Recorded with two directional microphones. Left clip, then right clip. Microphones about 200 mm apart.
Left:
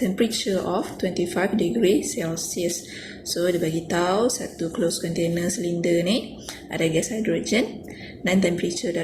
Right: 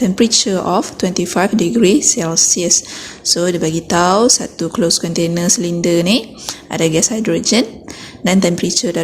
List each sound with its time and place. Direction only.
0.2 s speech: 45° right (ahead or behind)